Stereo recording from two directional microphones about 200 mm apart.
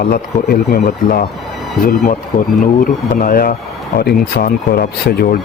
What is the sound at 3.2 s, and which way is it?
Speech, 45° left (ahead or behind).